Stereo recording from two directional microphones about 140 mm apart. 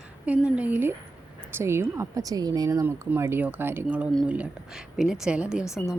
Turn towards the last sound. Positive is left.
turn(degrees=-5)  # may be behind; listen again after turning